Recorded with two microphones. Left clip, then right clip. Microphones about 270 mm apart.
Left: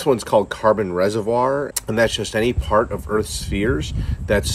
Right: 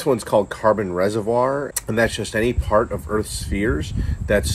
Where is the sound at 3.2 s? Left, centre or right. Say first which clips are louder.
Left 2 dB; left.